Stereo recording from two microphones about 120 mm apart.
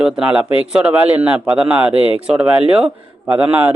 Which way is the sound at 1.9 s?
50° left (ahead or behind).